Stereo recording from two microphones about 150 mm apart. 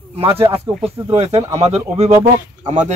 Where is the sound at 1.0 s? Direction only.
45° right (ahead or behind).